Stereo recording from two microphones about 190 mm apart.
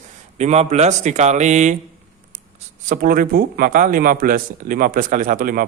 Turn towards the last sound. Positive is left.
turn(degrees=-50)  # may be behind; listen again after turning